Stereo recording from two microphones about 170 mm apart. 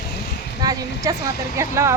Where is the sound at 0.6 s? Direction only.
20° right (ahead or behind).